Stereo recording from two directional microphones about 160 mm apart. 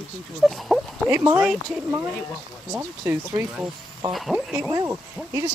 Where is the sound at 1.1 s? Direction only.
15° right (ahead or behind).